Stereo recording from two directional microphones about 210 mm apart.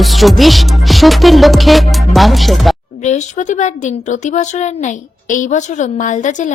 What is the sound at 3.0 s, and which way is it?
Speech, 35° left (ahead or behind).